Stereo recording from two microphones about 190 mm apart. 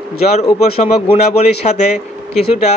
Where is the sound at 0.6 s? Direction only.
35° left (ahead or behind).